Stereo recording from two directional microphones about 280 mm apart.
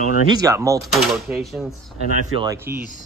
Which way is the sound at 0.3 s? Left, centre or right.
Centre.